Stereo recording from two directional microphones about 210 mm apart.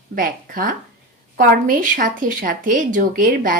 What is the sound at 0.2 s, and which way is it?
Speech, 40° right (ahead or behind).